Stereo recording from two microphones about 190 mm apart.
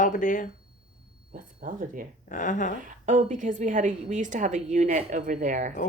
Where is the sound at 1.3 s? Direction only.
45° right (ahead or behind).